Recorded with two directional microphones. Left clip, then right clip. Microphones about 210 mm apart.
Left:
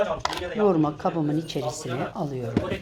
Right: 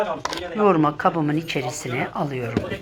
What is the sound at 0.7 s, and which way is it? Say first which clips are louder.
Speech: right 5 dB; 10° right (ahead or behind).